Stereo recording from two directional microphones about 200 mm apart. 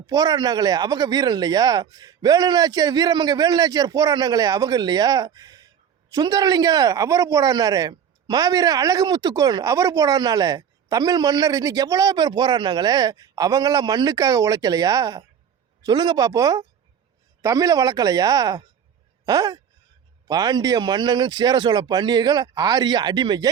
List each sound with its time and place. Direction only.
0.1 s speech: 20° right (ahead or behind)
19.2 s a sound: 20° right (ahead or behind)
20.2 s speech: 20° right (ahead or behind)